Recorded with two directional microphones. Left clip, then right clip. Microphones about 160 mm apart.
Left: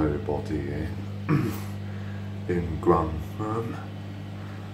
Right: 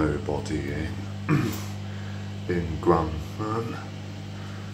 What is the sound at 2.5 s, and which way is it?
Speech, centre (ahead or behind).